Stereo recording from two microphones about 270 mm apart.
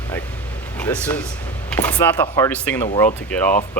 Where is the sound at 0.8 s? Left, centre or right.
Centre.